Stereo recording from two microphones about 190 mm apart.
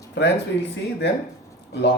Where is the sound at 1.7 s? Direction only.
60° left (ahead or behind).